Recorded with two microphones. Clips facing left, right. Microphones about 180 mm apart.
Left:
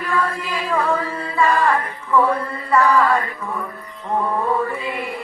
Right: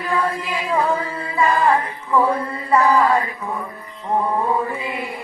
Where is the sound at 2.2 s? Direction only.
20° right (ahead or behind).